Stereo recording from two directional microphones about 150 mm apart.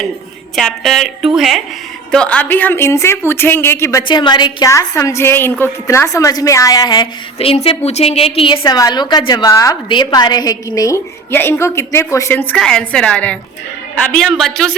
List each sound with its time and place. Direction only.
0.5 s a woman's voice: centre (ahead or behind)
4.1 s a woman's voice: 30° left (ahead or behind)
7.3 s a woman's voice: 40° left (ahead or behind); by 14.8 s 5° left (ahead or behind)